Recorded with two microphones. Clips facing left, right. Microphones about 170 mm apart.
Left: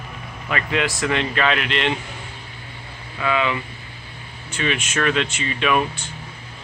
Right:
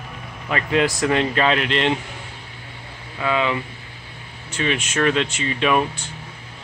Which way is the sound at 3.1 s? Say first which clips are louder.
Even; 30° right (ahead or behind).